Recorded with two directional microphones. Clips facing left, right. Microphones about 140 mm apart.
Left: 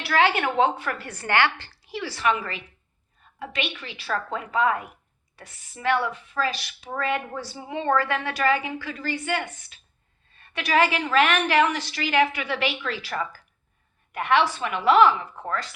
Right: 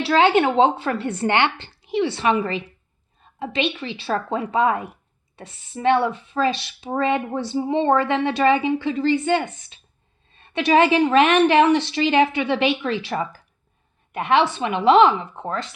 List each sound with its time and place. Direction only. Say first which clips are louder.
0.0 s a woman's voice: right 6 dB; 25° right (ahead or behind)